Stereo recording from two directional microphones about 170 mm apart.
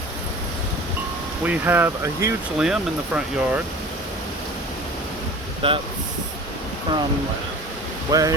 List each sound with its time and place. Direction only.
1.5 s speech: 10° right (ahead or behind)
5.6 s speech: 30° right (ahead or behind)
8.1 s speech: 20° right (ahead or behind)